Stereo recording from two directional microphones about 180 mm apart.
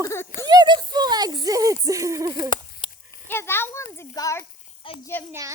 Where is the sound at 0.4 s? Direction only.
25° right (ahead or behind).